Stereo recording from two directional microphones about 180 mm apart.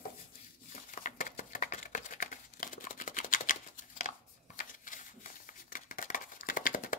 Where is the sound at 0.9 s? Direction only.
45° left (ahead or behind).